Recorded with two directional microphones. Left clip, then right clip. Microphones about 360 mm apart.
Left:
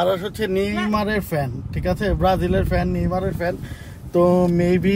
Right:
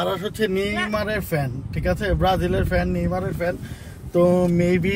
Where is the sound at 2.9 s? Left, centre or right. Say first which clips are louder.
Left 2 dB; centre.